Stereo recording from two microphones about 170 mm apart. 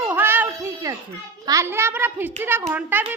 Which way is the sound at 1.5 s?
15° right (ahead or behind).